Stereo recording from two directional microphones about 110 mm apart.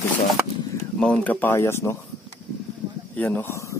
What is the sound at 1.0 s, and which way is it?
Speech, 10° left (ahead or behind).